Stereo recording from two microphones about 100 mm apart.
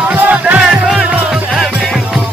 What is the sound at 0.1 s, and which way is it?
Music, 15° right (ahead or behind).